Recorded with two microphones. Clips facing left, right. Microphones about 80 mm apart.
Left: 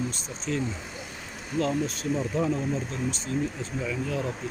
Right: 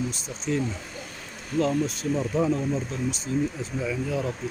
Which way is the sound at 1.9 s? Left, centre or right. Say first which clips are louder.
Right 2 dB; centre.